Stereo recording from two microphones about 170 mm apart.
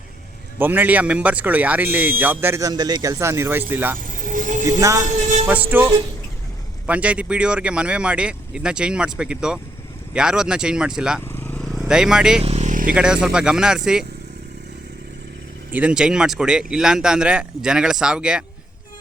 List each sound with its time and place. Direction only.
0.6 s speech: 10° right (ahead or behind)
4.1 s vehicle: 50° right (ahead or behind)
4.8 s speech: 20° right (ahead or behind)
11.3 s vehicle: 10° left (ahead or behind)
11.6 s vehicle: centre (ahead or behind)
12.4 s vehicle: 40° right (ahead or behind)
12.9 s speech: 5° right (ahead or behind)
15.7 s speech: 5° right (ahead or behind)